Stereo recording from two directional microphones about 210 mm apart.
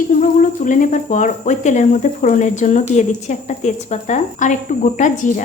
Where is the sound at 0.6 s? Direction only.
40° left (ahead or behind).